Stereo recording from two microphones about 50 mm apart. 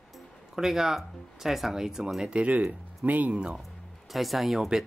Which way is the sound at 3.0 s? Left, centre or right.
Right.